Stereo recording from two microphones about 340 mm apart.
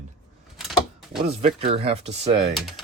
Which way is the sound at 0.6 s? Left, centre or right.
Centre.